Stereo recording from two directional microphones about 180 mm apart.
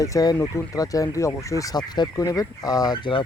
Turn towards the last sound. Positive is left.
turn(degrees=25)  # may be behind; listen again after turning